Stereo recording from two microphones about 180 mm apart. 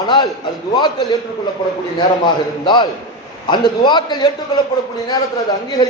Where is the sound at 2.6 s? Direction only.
25° left (ahead or behind).